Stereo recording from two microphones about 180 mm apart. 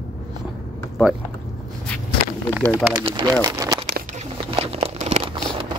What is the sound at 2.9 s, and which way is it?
Speech, 25° right (ahead or behind).